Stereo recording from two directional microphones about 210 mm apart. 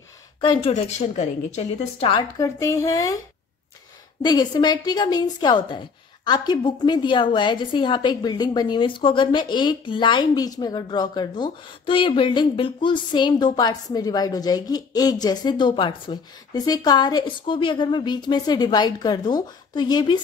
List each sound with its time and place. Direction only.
0.4 s a woman's voice: 25° left (ahead or behind)
4.2 s a woman's voice: 20° left (ahead or behind)